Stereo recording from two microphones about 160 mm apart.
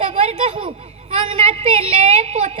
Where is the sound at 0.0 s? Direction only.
40° right (ahead or behind).